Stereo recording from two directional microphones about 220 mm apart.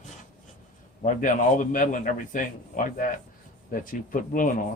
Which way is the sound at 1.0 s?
35° left (ahead or behind).